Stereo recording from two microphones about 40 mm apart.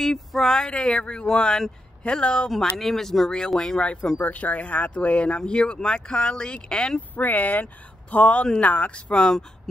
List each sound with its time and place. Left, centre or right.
0.0 s speech: centre
0.7 s speech: left
2.8 s speech: centre
3.8 s speech: left
4.2 s speech: left
7.0 s speech: left
8.1 s speech: left
9.1 s speech: centre